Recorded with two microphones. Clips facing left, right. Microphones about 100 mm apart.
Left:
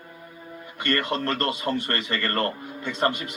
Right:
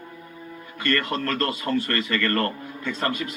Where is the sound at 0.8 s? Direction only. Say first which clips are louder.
Right 1 dB; 25° left (ahead or behind).